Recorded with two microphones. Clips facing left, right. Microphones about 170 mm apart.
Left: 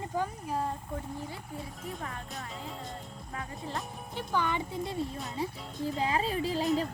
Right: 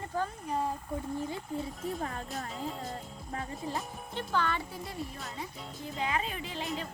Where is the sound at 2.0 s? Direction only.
35° right (ahead or behind).